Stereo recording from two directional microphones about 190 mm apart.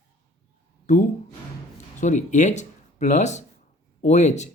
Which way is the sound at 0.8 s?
40° left (ahead or behind).